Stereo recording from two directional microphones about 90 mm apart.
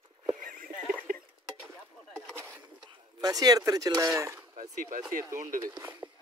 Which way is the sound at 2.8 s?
50° right (ahead or behind).